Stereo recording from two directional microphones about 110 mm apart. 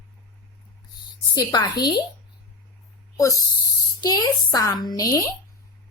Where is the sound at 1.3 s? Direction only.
35° left (ahead or behind).